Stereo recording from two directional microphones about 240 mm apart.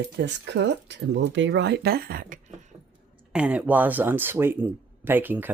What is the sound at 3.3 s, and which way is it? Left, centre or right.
Speech, centre.